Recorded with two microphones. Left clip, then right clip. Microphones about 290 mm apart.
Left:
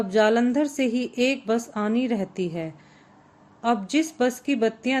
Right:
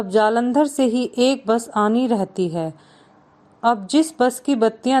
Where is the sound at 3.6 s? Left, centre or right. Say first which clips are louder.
Right 6 dB; right.